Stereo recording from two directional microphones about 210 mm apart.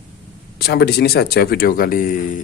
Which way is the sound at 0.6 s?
50° left (ahead or behind).